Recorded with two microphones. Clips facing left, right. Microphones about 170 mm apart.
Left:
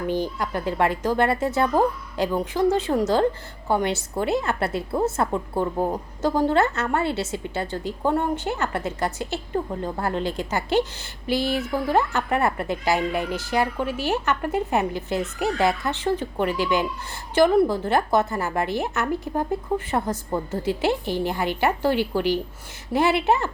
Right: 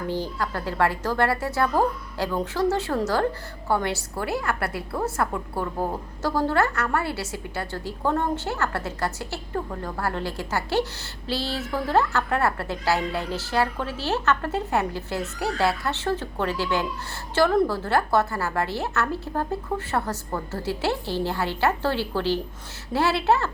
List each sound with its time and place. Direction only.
0.1 s a woman's voice: 20° left (ahead or behind)